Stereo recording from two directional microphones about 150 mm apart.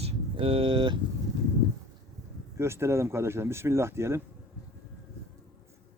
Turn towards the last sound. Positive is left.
turn(degrees=-15)  # may be behind; listen again after turning